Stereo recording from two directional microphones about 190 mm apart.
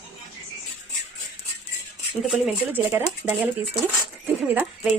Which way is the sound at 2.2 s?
10° right (ahead or behind).